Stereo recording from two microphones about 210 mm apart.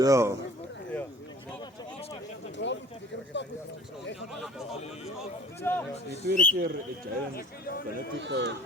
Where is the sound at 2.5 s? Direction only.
60° left (ahead or behind).